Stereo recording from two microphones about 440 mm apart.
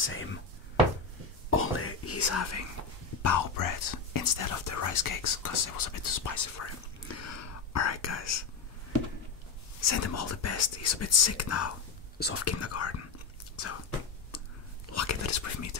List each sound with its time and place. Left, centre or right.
0.0 s speech: left
1.5 s whispering: left
3.2 s speech: left
9.8 s speech: left
14.9 s whispering: left